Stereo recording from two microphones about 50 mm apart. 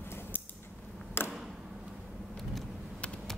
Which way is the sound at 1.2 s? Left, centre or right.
Left.